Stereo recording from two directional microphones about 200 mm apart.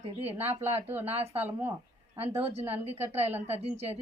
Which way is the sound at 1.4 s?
10° right (ahead or behind).